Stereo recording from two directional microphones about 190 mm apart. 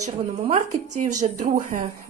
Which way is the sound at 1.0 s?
45° right (ahead or behind).